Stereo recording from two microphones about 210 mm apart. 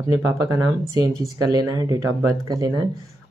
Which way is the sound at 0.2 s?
15° right (ahead or behind).